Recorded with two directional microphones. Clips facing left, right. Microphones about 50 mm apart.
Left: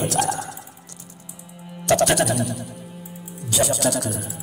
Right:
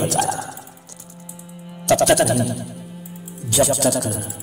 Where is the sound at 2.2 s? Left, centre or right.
Right.